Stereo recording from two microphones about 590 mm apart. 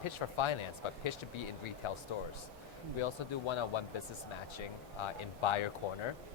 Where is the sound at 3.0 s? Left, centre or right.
Left.